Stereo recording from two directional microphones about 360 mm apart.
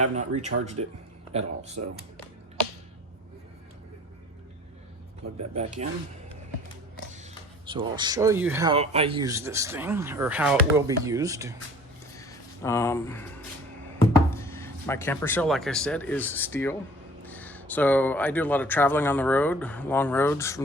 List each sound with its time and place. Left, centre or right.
0.2 s speech: centre
5.4 s speech: centre
7.7 s speech: centre
12.1 s a sound: centre
14.3 s speech: centre